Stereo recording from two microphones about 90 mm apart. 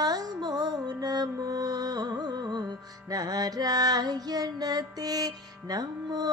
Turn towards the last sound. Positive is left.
turn(degrees=-45)  # may be behind; listen again after turning